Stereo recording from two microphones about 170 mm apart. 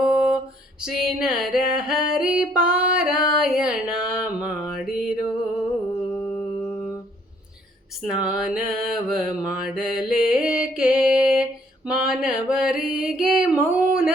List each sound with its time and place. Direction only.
0.0 s music: 5° right (ahead or behind)
6.1 s music: 10° left (ahead or behind)
8.0 s mantra: 5° right (ahead or behind)
11.9 s music: 5° right (ahead or behind)
13.7 s a sound: 5° right (ahead or behind)